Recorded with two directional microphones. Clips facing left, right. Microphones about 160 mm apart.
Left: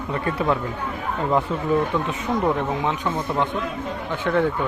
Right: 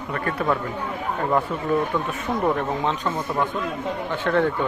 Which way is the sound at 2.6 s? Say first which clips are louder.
Even; 15° left (ahead or behind).